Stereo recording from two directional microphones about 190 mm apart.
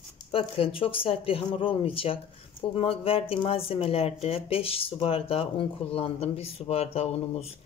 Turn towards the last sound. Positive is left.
turn(degrees=30)  # may be behind; listen again after turning